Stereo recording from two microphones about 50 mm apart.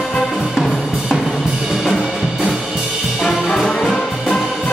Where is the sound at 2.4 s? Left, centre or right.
Centre.